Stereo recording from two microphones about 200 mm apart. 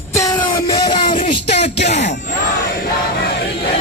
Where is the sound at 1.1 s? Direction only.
30° left (ahead or behind).